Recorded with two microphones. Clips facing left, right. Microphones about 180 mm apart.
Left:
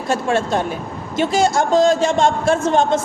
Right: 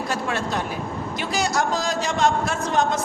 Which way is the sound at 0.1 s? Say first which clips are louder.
Left 10 dB; 25° left (ahead or behind).